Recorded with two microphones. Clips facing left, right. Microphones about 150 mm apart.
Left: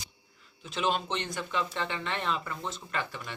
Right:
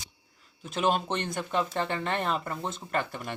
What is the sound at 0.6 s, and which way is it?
Speech, 50° right (ahead or behind).